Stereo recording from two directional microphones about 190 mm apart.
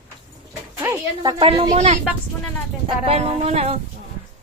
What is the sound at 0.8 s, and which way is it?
Speech, 15° right (ahead or behind).